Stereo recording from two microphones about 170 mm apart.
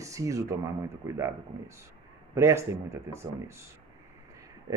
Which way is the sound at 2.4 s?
15° right (ahead or behind).